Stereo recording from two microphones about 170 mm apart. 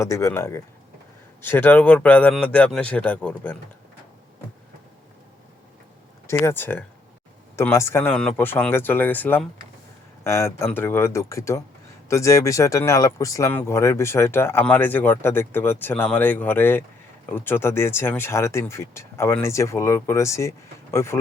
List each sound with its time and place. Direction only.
0.0 s speech: 15° left (ahead or behind)
6.2 s speech: 15° left (ahead or behind)